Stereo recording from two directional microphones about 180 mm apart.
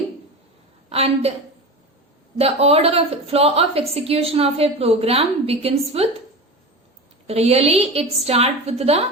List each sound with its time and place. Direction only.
0.9 s a woman's voice: 35° right (ahead or behind)
2.4 s a woman's voice: 35° right (ahead or behind)
7.3 s a woman's voice: 35° right (ahead or behind)